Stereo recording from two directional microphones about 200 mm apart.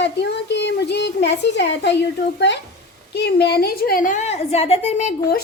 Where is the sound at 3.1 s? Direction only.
55° left (ahead or behind); by 5.1 s 35° left (ahead or behind).